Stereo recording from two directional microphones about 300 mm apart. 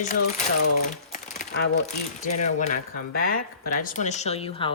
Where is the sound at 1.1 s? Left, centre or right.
Left.